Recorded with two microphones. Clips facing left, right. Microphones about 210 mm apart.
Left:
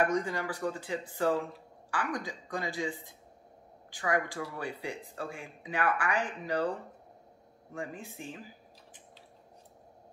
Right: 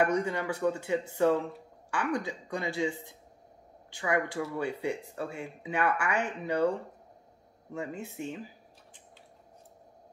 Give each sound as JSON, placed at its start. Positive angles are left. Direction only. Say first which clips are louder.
{"t": 0.0, "sound": "speech", "louder": "right 2 dB", "side_deg": -25}
{"t": 3.9, "sound": "speech", "louder": "right 2 dB", "side_deg": -25}
{"t": 7.7, "sound": "speech", "louder": "right 3 dB", "side_deg": -25}